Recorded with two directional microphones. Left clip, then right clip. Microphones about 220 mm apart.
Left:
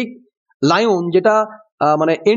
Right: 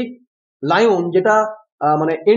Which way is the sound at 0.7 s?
50° left (ahead or behind).